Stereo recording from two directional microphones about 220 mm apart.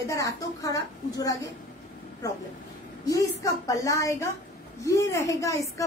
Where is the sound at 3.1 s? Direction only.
15° left (ahead or behind).